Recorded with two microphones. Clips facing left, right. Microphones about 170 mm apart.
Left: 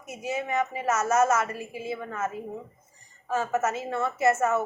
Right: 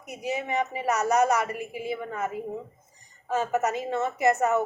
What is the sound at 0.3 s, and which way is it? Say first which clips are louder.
A woman's voice: even; 15° right (ahead or behind).